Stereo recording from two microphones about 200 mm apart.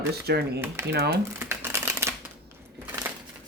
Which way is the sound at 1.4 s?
10° right (ahead or behind).